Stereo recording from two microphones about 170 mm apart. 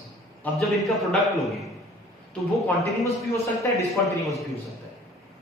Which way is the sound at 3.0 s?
20° left (ahead or behind).